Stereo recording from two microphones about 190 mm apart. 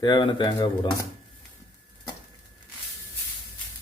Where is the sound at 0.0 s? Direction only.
25° left (ahead or behind).